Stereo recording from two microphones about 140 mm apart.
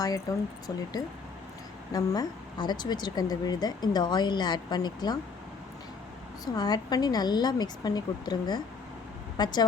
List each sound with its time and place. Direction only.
0.0 s speech: 25° left (ahead or behind)
6.4 s a woman's voice: 30° left (ahead or behind)